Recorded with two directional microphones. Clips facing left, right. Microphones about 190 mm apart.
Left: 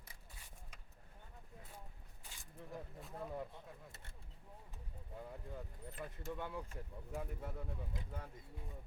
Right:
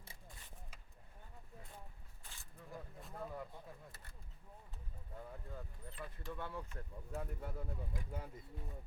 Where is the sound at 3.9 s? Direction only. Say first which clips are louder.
Left 1 dB; 25° left (ahead or behind).